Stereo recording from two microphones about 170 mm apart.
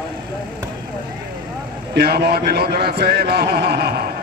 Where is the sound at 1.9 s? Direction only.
70° right (ahead or behind).